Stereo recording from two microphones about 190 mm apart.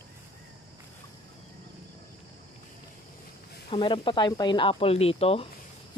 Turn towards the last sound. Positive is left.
turn(degrees=30)  # may be behind; listen again after turning